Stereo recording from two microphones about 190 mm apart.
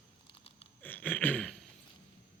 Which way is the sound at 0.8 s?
10° left (ahead or behind).